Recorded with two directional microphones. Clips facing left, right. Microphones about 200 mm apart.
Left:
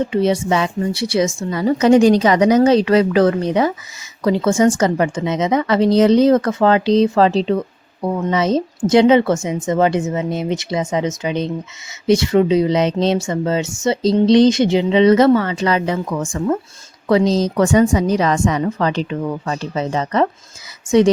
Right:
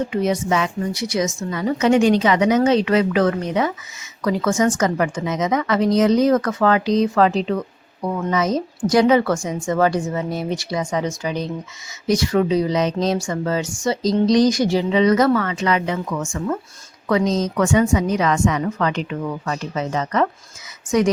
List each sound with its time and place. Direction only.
0.1 s a woman's voice: 30° left (ahead or behind)